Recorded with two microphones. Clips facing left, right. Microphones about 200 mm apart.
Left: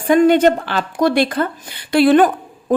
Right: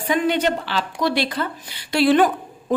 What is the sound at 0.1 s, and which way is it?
Speech, 50° left (ahead or behind).